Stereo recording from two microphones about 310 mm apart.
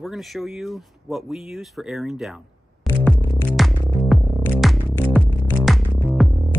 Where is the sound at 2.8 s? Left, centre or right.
Centre.